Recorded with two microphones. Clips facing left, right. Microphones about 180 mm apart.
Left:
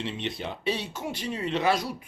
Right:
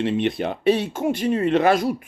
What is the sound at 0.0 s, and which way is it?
Speech, 55° right (ahead or behind).